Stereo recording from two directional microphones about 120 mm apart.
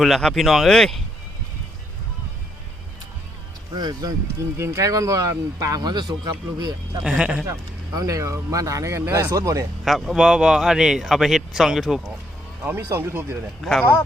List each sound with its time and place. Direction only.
0.0 s speech: 5° left (ahead or behind)
3.8 s speech: 35° right (ahead or behind)
7.0 s speech: 10° right (ahead or behind)
7.9 s speech: 25° right (ahead or behind)
9.8 s speech: centre (ahead or behind)
12.6 s speech: 20° right (ahead or behind)